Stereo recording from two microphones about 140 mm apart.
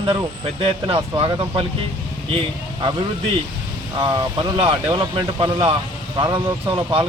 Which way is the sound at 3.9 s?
35° right (ahead or behind).